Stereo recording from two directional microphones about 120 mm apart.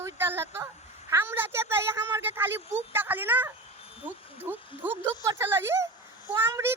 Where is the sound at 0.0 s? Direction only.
20° right (ahead or behind).